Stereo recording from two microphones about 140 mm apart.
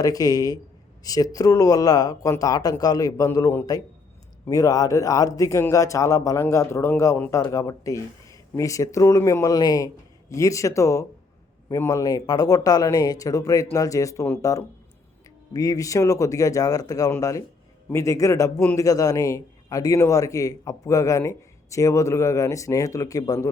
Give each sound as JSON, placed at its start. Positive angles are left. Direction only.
{"t": 0.0, "sound": "speech", "side_deg": 25}